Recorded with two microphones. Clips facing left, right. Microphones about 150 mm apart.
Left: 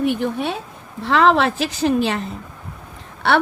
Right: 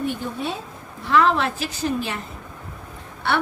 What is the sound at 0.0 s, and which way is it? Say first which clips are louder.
Speech: left 6 dB; 80° left.